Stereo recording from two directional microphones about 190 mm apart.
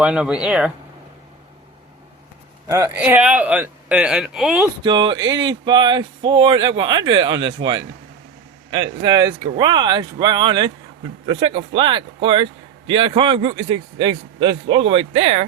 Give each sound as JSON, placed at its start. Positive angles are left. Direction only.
{"t": 0.0, "sound": "speech", "side_deg": -5}
{"t": 2.6, "sound": "speech", "side_deg": -15}
{"t": 4.8, "sound": "speech", "side_deg": -25}
{"t": 7.6, "sound": "speech", "side_deg": -90}
{"t": 8.7, "sound": "speech", "side_deg": -25}